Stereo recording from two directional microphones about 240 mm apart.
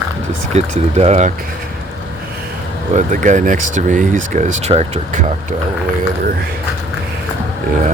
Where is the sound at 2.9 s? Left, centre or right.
Right.